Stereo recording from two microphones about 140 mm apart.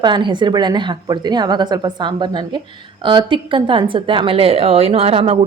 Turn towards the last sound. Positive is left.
turn(degrees=-45)  # may be behind; listen again after turning